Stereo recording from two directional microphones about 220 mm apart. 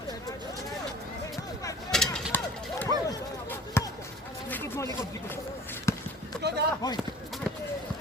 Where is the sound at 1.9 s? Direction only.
Centre (ahead or behind).